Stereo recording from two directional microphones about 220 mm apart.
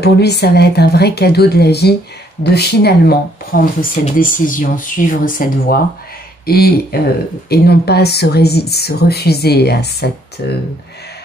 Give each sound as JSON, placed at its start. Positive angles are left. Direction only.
{"t": 0.0, "sound": "speech", "side_deg": 50}